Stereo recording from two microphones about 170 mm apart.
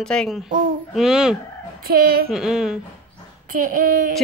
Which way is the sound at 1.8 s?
60° right (ahead or behind).